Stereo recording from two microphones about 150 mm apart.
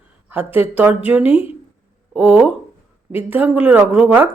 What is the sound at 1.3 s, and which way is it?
Speech, 40° left (ahead or behind).